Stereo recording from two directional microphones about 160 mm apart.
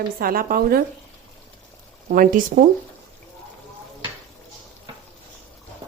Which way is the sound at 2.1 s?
60° right (ahead or behind).